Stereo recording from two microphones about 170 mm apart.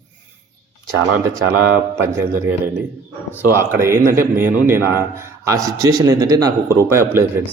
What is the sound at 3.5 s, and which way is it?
A man's voice, 15° right (ahead or behind).